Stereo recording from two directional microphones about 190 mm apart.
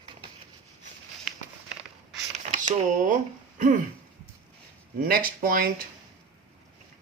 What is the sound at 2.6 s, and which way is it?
Speech, 40° right (ahead or behind).